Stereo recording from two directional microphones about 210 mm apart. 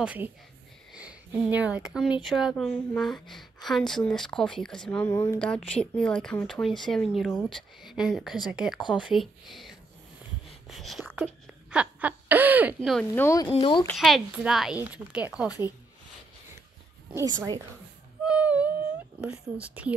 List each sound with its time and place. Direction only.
0.0 s a woman's voice: 5° right (ahead or behind)
13.1 s speech: 15° left (ahead or behind)
13.8 s speech: centre (ahead or behind)
17.1 s a woman's voice: 15° right (ahead or behind)
18.2 s a sound: 5° right (ahead or behind)
19.5 s a woman's voice: 5° right (ahead or behind)